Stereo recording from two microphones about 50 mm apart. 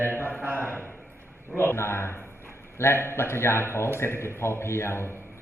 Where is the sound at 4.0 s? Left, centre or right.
Left.